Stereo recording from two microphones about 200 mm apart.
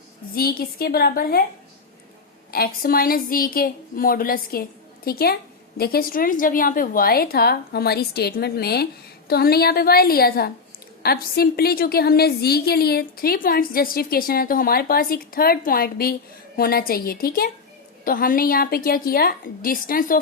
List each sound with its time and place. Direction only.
0.3 s a woman's voice: 50° left (ahead or behind)
2.5 s a woman's voice: 50° left (ahead or behind)